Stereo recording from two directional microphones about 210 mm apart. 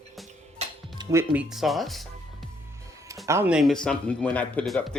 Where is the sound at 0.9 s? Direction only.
10° right (ahead or behind).